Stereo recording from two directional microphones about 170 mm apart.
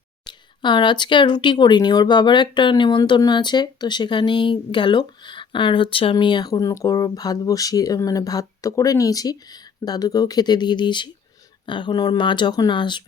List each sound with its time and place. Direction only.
0.3 s speech: 25° left (ahead or behind)